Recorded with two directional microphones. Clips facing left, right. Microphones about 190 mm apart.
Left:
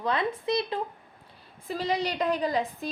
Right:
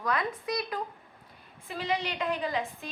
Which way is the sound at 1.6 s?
35° left (ahead or behind).